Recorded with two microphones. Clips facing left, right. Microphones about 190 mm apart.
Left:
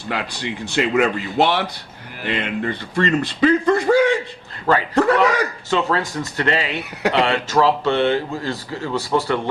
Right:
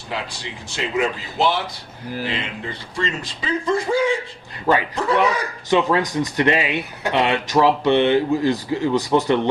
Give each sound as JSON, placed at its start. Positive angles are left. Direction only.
{"t": 0.1, "sound": "speech", "side_deg": 65}
{"t": 5.7, "sound": "speech", "side_deg": -15}